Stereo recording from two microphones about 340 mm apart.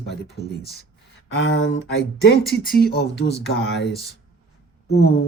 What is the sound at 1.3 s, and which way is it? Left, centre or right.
Speech, left.